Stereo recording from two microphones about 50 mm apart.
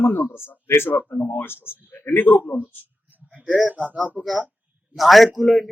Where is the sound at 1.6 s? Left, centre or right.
Right.